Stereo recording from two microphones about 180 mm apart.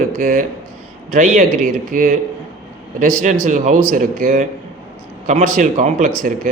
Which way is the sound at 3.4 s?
45° right (ahead or behind).